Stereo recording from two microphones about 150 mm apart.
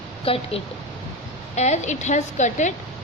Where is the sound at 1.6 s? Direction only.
50° left (ahead or behind).